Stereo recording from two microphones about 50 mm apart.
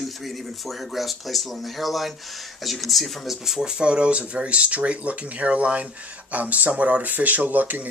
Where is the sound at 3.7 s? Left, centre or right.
Right.